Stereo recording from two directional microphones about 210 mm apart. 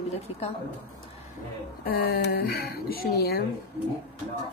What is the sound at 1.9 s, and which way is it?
Speech, 45° left (ahead or behind).